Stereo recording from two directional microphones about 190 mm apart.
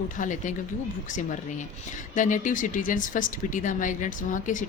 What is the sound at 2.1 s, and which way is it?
Speech, 45° left (ahead or behind).